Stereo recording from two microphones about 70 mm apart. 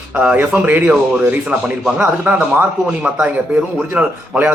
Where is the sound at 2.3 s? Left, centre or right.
Right.